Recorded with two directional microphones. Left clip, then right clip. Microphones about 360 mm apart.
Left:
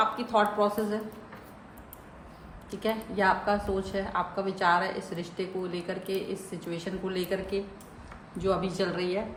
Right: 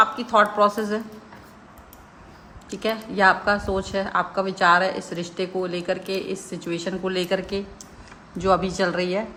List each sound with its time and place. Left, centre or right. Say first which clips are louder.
0.0 s speech: right 7 dB; right
2.6 s a woman's voice: right 5 dB; right